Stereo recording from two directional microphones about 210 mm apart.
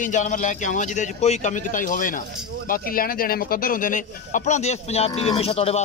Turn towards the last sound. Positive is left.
turn(degrees=30)  # may be behind; listen again after turning